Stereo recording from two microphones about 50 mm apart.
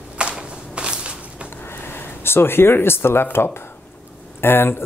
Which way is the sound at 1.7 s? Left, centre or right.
Left.